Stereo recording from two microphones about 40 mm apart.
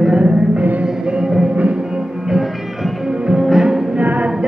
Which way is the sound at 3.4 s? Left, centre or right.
Centre.